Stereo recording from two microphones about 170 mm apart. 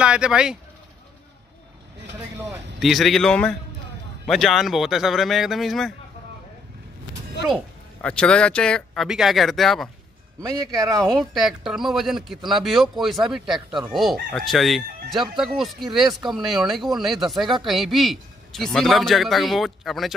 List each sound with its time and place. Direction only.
0.0 s speech: 5° right (ahead or behind)
2.8 s speech: centre (ahead or behind)
8.0 s speech: 5° left (ahead or behind)
10.4 s speech: 20° right (ahead or behind)
11.1 s speech: centre (ahead or behind)